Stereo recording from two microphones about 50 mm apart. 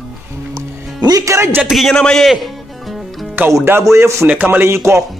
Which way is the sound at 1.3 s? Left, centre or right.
Right.